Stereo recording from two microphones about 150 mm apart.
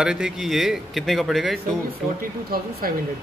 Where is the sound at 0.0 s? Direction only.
5° right (ahead or behind).